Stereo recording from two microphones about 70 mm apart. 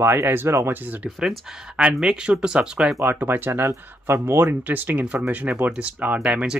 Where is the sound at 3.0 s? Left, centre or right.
Right.